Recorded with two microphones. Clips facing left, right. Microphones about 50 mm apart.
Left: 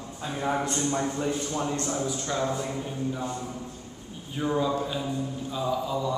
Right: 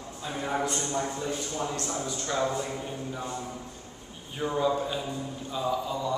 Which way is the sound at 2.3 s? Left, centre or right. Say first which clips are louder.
Right 1 dB; centre.